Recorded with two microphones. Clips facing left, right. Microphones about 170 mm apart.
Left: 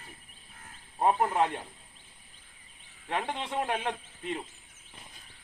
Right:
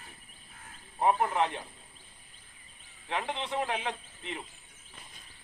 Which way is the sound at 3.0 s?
45° left (ahead or behind).